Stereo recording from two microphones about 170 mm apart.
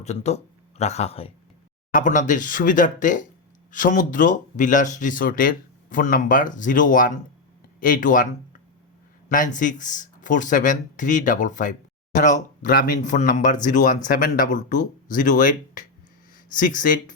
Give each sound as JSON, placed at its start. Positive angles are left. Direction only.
{"t": 0.0, "sound": "speech", "side_deg": 40}
{"t": 1.9, "sound": "speech", "side_deg": 50}
{"t": 9.3, "sound": "speech", "side_deg": 50}